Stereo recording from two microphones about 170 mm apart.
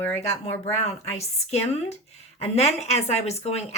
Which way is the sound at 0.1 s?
40° left (ahead or behind).